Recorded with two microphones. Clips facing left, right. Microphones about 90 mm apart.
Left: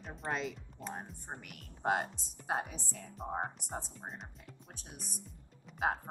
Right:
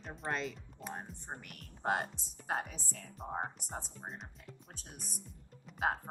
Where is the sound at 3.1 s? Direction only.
5° left (ahead or behind).